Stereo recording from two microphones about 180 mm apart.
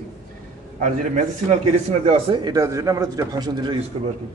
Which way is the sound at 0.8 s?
45° right (ahead or behind).